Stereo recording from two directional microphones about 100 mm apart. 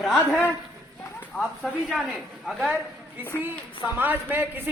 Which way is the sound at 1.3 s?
5° right (ahead or behind).